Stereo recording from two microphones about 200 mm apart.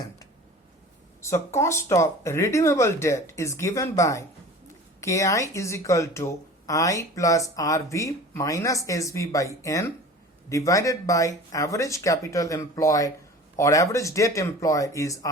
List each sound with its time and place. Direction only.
1.2 s speech: 15° left (ahead or behind)